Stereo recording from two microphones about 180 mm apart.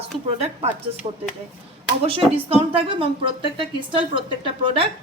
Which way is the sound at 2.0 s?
30° right (ahead or behind).